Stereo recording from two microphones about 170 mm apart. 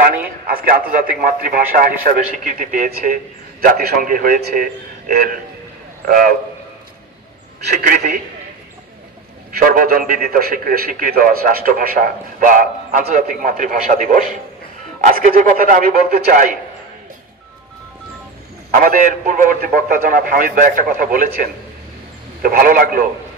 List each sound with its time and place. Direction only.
0.5 s a man's voice: 60° right (ahead or behind)
7.7 s a man's voice: 55° right (ahead or behind)
9.5 s a man's voice: 55° right (ahead or behind)
18.7 s a man's voice: 55° right (ahead or behind)